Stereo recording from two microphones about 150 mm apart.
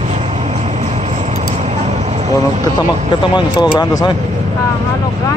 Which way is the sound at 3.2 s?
30° left (ahead or behind).